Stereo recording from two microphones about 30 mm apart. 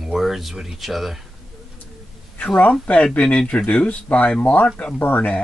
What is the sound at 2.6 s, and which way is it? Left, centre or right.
Speech, left.